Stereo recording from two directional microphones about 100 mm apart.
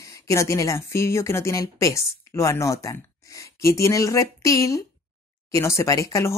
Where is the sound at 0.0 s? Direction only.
30° left (ahead or behind).